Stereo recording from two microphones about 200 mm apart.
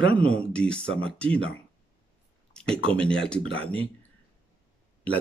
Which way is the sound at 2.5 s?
5° left (ahead or behind).